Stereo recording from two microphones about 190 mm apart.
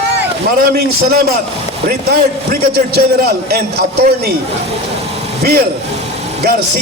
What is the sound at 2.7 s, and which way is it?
A man's voice, 55° right (ahead or behind).